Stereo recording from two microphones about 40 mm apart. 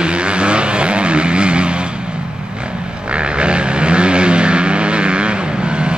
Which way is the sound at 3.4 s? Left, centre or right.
Right.